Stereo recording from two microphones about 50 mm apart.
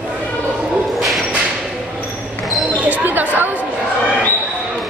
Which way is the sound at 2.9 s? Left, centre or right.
Right.